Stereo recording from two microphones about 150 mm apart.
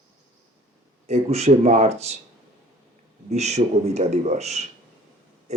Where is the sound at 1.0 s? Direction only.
45° right (ahead or behind).